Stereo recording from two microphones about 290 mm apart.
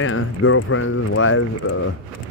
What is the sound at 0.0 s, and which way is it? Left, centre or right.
Speech, left.